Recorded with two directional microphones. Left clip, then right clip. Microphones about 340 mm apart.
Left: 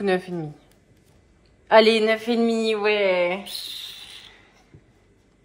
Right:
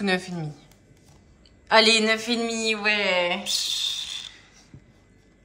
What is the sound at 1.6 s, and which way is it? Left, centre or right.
Speech, centre.